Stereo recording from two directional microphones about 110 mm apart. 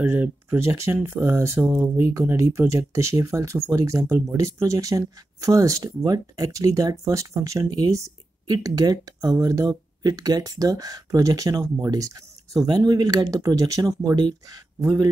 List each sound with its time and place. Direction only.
0.0 s speech: 20° right (ahead or behind); by 14.6 s 35° right (ahead or behind)